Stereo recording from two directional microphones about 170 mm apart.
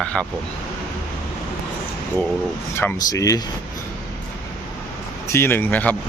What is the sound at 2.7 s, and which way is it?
Speech, 15° left (ahead or behind).